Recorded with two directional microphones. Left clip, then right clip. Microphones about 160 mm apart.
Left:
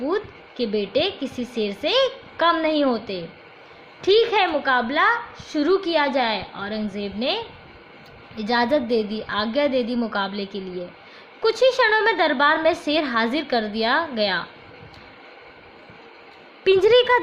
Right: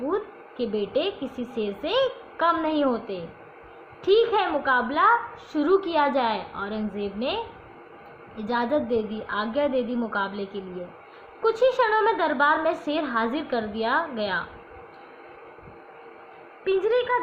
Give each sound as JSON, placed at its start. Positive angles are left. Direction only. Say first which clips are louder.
{"t": 0.1, "sound": "a woman's voice", "louder": "left 3 dB", "side_deg": 30}
{"t": 16.6, "sound": "a woman's voice", "louder": "left 7 dB", "side_deg": 50}